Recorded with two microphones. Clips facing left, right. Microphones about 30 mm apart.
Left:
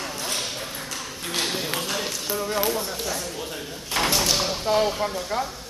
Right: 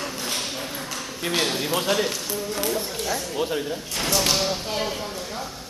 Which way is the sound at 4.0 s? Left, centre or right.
Left.